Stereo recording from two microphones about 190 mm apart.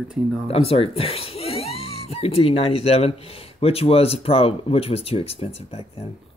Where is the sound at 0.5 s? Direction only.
30° left (ahead or behind).